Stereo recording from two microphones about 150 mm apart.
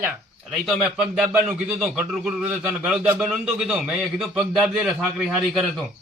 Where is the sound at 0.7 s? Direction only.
5° right (ahead or behind).